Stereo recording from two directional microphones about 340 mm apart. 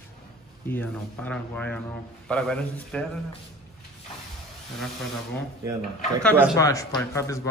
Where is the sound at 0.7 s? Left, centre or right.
Centre.